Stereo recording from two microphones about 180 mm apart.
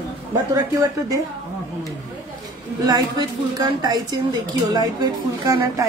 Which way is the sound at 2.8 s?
20° right (ahead or behind).